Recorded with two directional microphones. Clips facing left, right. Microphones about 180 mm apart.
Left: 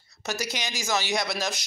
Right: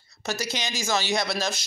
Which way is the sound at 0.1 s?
15° left (ahead or behind).